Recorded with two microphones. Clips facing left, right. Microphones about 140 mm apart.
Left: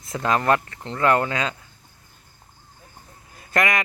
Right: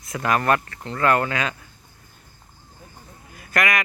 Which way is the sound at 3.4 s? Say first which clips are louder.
Left 1 dB; 25° left (ahead or behind).